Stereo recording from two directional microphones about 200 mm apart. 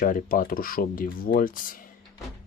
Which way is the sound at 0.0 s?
45° left (ahead or behind).